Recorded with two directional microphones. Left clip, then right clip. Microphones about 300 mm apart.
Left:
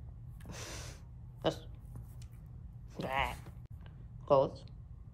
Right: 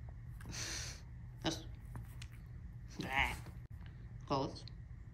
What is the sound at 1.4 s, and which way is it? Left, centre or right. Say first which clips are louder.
Hiccup: left 6 dB; centre.